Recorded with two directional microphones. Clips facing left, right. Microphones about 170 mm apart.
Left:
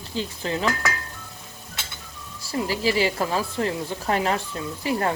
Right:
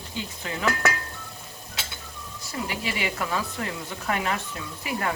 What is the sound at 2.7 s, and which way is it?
Speech, 30° left (ahead or behind).